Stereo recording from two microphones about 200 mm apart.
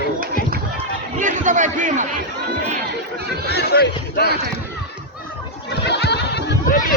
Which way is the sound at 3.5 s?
55° left (ahead or behind).